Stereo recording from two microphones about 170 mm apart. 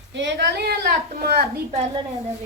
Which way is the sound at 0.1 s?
90° right.